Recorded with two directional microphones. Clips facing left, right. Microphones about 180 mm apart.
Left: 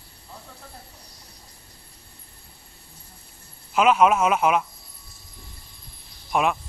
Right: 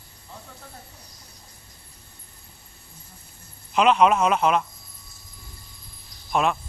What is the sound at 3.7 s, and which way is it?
Speech, 5° left (ahead or behind).